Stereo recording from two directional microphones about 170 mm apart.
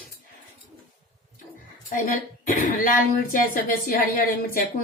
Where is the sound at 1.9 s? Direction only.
50° left (ahead or behind).